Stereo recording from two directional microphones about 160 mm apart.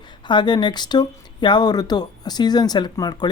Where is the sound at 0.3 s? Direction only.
30° left (ahead or behind).